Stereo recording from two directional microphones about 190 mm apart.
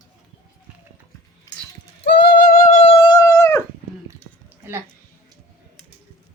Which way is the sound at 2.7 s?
35° left (ahead or behind).